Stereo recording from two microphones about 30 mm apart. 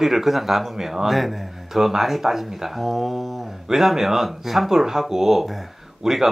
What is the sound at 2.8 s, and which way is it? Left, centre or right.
Speech, centre.